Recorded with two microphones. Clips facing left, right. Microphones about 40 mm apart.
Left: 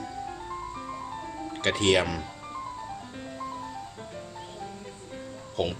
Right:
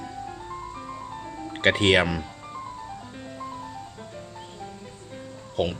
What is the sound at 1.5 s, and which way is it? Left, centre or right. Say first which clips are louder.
Speech: right 4 dB; right.